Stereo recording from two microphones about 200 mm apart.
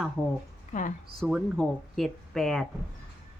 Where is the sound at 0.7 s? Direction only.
40° left (ahead or behind).